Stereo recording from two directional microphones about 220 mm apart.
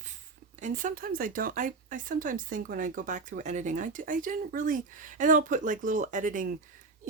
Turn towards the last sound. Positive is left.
turn(degrees=-35)  # may be behind; listen again after turning